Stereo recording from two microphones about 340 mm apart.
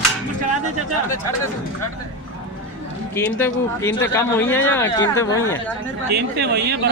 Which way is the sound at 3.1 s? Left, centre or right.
Centre.